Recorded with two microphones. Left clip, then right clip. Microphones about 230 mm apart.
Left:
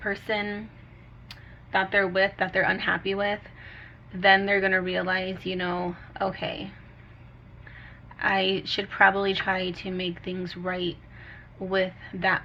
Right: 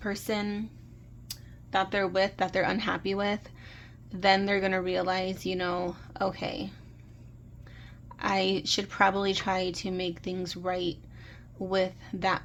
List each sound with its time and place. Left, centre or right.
0.0 s speech: right
8.1 s speech: right